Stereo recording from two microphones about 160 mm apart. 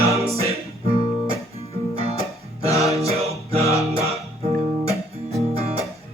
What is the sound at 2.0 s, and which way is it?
Music, 40° right (ahead or behind).